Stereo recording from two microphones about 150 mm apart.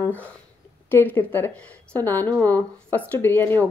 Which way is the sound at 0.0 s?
10° left (ahead or behind).